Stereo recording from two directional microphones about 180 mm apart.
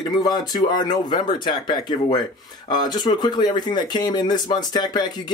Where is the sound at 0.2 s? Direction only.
20° left (ahead or behind).